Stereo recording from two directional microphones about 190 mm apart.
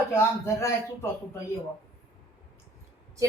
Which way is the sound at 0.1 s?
15° left (ahead or behind).